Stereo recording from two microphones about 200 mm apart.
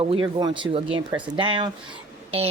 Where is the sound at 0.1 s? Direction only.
25° right (ahead or behind).